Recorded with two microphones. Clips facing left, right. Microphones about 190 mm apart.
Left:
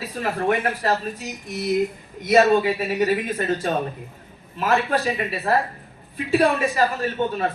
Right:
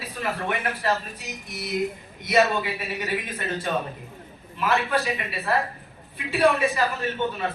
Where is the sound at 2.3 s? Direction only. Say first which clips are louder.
Left 6 dB; 40° left (ahead or behind).